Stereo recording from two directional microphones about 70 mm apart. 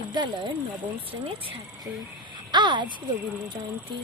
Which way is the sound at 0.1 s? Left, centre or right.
Right.